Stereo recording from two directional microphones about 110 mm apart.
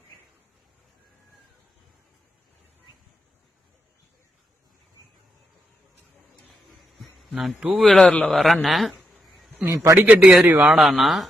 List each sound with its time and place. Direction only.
7.0 s a man's voice: centre (ahead or behind)
7.9 s a man's voice: 10° left (ahead or behind)
9.0 s a sound: 5° left (ahead or behind)
9.6 s a man's voice: 25° right (ahead or behind)
9.9 s a man's voice: 10° right (ahead or behind)